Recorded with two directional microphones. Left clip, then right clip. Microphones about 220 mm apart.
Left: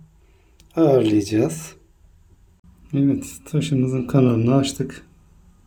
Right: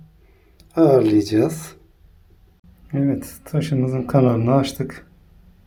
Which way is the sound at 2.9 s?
15° left (ahead or behind).